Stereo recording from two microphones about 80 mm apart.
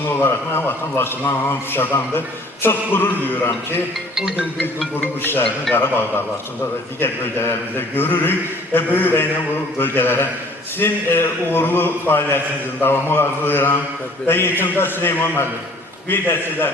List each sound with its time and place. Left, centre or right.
0.2 s a man's voice: left
4.1 s music: centre
4.9 s a man's voice: left